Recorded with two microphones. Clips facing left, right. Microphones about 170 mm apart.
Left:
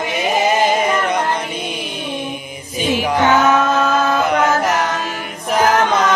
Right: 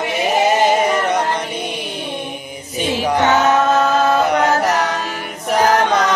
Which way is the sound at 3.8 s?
40° right (ahead or behind).